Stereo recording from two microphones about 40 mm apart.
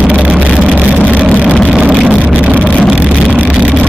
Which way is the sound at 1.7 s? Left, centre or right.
Right.